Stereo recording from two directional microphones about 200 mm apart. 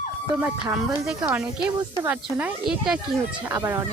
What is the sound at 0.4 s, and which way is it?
Speech, centre (ahead or behind).